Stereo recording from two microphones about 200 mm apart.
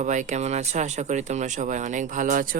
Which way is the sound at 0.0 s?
35° right (ahead or behind).